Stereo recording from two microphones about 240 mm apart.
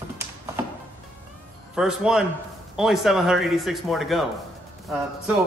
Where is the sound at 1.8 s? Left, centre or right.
Centre.